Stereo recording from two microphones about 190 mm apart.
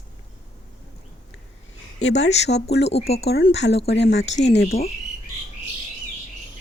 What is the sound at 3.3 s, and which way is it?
Speech, 55° left (ahead or behind).